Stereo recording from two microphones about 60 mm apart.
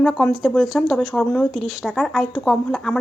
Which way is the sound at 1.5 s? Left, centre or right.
Centre.